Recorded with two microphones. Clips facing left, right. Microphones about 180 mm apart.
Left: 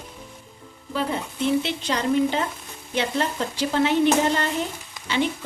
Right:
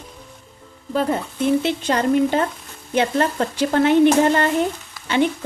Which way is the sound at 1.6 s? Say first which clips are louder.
Right 5 dB; 50° right (ahead or behind).